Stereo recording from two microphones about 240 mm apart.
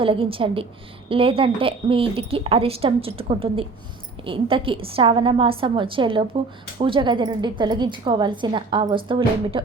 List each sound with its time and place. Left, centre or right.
0.0 s a woman's voice: right